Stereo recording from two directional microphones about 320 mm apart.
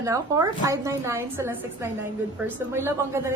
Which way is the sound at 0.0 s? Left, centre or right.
Centre.